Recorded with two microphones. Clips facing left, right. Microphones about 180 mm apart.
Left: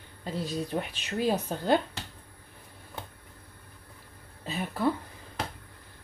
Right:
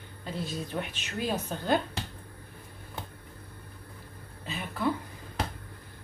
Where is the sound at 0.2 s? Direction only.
40° left (ahead or behind).